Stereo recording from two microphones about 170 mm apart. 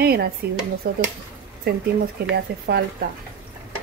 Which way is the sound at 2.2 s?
70° right (ahead or behind).